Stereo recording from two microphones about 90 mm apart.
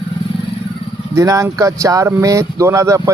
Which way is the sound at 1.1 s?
35° right (ahead or behind).